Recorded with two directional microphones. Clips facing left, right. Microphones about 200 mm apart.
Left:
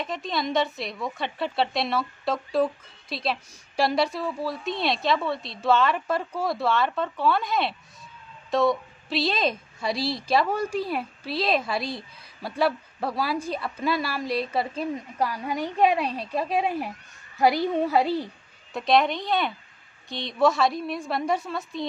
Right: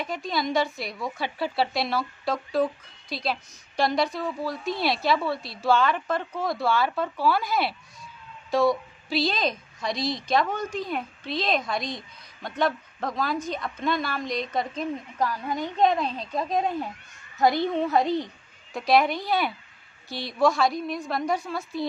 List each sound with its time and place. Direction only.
0.0 s a woman's voice: centre (ahead or behind)